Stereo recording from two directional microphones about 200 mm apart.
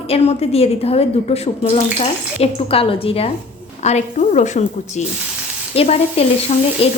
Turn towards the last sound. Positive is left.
turn(degrees=30)  # may be behind; listen again after turning